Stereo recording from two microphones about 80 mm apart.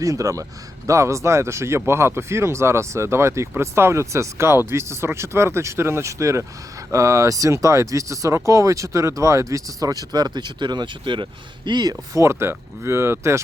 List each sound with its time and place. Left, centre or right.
0.0 s speech: right